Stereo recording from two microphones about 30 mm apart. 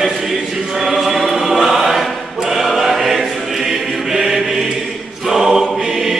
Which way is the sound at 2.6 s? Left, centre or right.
Centre.